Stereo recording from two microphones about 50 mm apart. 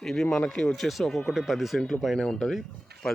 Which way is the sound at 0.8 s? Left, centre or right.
Centre.